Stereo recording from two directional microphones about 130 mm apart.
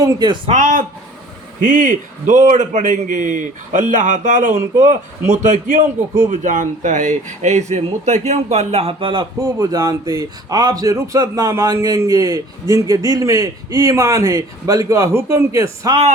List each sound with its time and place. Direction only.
0.0 s a man's voice: 30° right (ahead or behind)
0.5 s a man's voice: 80° right
6.3 s a man's voice: 85° right; by 9.2 s 40° right (ahead or behind)
9.4 s speech: 30° right (ahead or behind)